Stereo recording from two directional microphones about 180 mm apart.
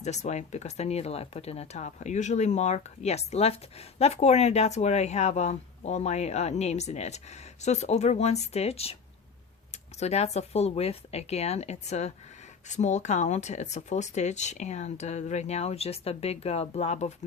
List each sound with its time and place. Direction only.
0.0 s speech: 40° left (ahead or behind)